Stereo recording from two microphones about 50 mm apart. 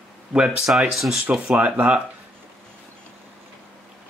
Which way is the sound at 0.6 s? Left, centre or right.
Centre.